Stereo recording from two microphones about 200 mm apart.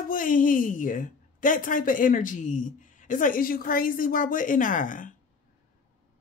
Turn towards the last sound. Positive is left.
turn(degrees=40)  # may be behind; listen again after turning